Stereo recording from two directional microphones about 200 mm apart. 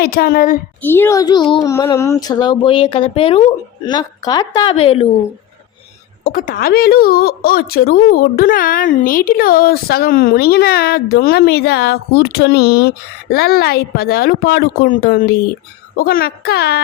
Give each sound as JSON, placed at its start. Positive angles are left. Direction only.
{"t": 0.0, "sound": "a woman's voice", "side_deg": 50}
{"t": 0.8, "sound": "speech", "side_deg": 10}
{"t": 6.2, "sound": "a woman's voice", "side_deg": 45}